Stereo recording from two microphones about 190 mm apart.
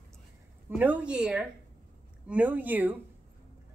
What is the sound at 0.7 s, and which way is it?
Speech, 10° right (ahead or behind).